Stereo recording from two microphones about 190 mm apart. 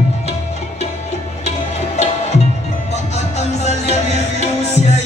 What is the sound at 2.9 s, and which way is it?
Music, 35° left (ahead or behind).